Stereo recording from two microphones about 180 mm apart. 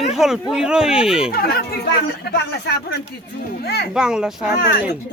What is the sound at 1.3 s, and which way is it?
Speech, 55° left (ahead or behind).